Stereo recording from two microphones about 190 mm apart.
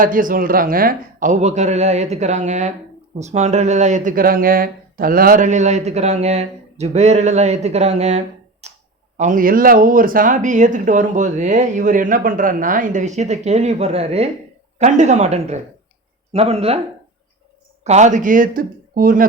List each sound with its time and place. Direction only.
0.0 s speech: 45° right (ahead or behind)
8.6 s a sound: 35° right (ahead or behind)
9.1 s speech: 40° right (ahead or behind)
17.8 s speech: 40° right (ahead or behind)